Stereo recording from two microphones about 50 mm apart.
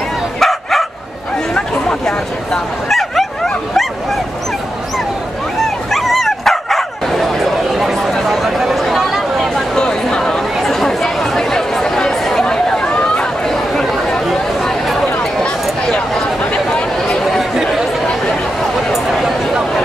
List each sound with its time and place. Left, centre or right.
0.4 s bow-wow: centre
1.5 s chatter: centre
2.9 s vehicle: centre
5.9 s bow-wow: centre
7.8 s a sound: centre
9.8 s chatter: centre
12.7 s a sound: centre
14.1 s chatter: centre